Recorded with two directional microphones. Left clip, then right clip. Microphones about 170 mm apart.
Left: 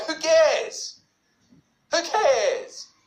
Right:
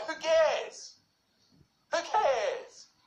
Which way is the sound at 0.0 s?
30° left (ahead or behind).